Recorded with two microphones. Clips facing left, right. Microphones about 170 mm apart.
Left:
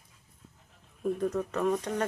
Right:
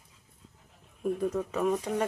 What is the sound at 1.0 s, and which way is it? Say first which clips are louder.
Speech: even; 5° right (ahead or behind).